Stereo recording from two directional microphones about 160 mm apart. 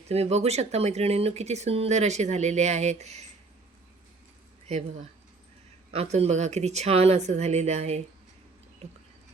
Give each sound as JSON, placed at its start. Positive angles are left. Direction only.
{"t": 0.1, "sound": "speech", "side_deg": -40}
{"t": 5.9, "sound": "speech", "side_deg": -40}
{"t": 8.8, "sound": "a sound", "side_deg": -45}